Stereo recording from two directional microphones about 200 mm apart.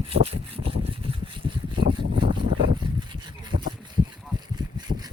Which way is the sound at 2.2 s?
35° right (ahead or behind).